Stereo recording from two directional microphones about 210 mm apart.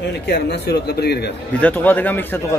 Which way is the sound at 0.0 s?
55° left (ahead or behind).